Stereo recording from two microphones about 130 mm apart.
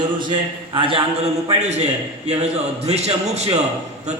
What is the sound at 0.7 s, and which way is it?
Speech, 45° right (ahead or behind).